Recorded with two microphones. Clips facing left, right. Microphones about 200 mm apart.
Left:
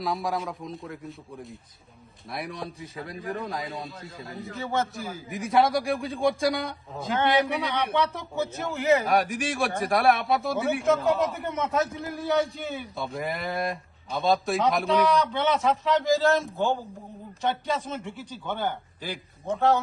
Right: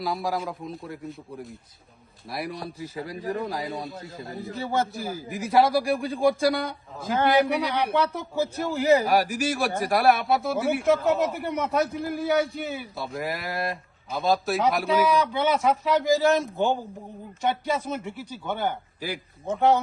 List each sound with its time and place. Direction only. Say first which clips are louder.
0.0 s a man's voice: right 1 dB; centre (ahead or behind)
4.5 s a man's voice: right 2 dB; 35° right (ahead or behind)
5.3 s a man's voice: right 2 dB; centre (ahead or behind)
8.7 s a man's voice: right 2 dB; 35° right (ahead or behind)
9.0 s a man's voice: right 2 dB; centre (ahead or behind)
16.1 s speech: right 1 dB; 15° right (ahead or behind)